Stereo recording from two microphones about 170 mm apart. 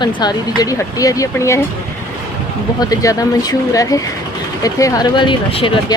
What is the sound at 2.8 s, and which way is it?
A woman's voice, 20° left (ahead or behind).